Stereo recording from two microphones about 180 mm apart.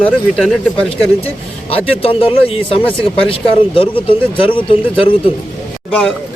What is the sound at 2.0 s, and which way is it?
Speech, 30° left (ahead or behind).